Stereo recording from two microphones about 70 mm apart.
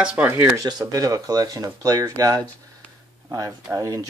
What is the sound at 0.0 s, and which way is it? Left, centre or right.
Speech, centre.